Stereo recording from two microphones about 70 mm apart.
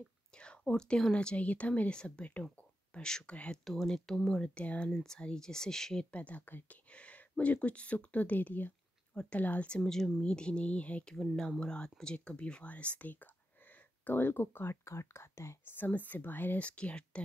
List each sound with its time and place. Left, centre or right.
0.3 s speech: centre
3.6 s speech: centre
6.1 s speech: left
9.1 s speech: centre
9.8 s speech: centre; by 15.8 s left
15.8 s speech: left